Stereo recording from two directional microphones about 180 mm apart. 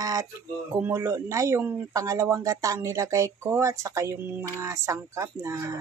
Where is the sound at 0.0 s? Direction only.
20° right (ahead or behind).